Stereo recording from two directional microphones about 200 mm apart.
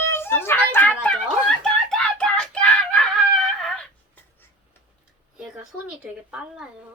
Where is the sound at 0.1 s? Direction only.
10° left (ahead or behind).